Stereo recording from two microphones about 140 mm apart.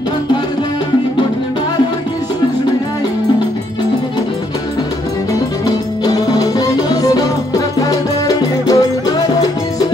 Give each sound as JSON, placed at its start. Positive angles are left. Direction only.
{"t": 6.0, "sound": "music", "side_deg": 25}